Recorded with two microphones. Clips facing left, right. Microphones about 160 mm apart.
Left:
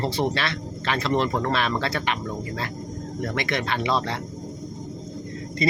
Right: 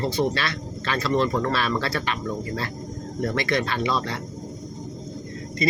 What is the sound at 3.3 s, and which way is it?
Speech, 20° left (ahead or behind).